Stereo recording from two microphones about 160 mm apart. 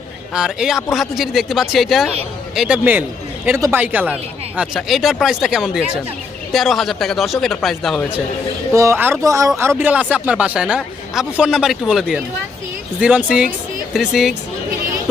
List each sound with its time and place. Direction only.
0.3 s speech: 5° right (ahead or behind)
8.7 s speech: 20° right (ahead or behind); by 14.3 s centre (ahead or behind)